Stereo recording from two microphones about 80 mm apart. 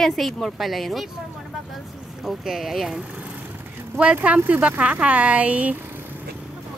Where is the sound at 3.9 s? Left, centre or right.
Centre.